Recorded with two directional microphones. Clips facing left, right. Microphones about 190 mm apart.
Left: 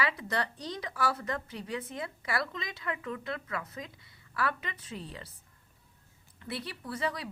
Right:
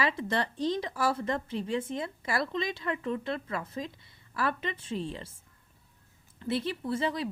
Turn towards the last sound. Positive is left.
turn(degrees=-25)  # may be behind; listen again after turning